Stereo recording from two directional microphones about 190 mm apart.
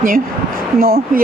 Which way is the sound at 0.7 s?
50° right (ahead or behind).